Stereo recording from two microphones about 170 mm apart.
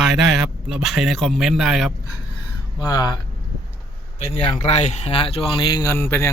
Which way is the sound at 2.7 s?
25° left (ahead or behind).